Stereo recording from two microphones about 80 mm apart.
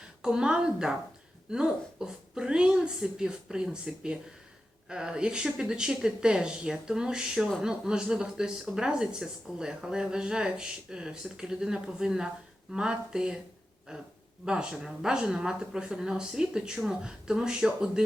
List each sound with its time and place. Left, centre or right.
0.2 s speech: centre